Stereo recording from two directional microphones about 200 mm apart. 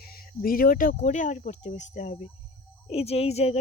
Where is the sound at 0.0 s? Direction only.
50° left (ahead or behind).